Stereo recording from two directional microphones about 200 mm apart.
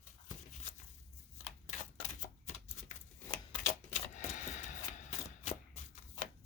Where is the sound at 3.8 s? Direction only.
35° left (ahead or behind).